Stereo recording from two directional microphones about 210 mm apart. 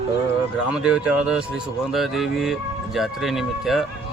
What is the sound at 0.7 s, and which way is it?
Speech, 5° right (ahead or behind).